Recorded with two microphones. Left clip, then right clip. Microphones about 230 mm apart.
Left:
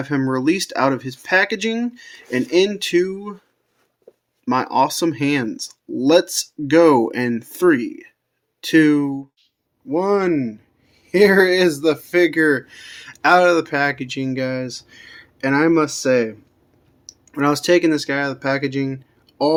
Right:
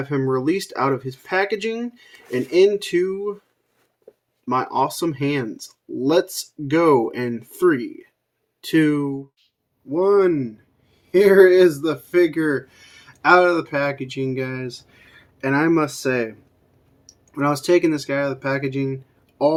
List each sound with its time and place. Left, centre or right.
0.1 s speech: left
4.4 s speech: left